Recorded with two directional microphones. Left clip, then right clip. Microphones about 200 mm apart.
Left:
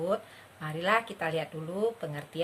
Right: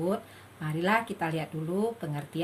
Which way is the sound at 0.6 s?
15° left (ahead or behind).